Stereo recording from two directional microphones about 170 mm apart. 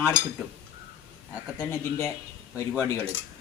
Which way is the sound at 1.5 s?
15° left (ahead or behind).